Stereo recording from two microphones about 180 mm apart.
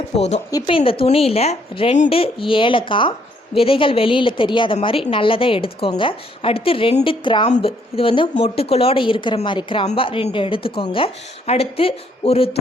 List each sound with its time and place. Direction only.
0.2 s a woman's voice: 40° left (ahead or behind)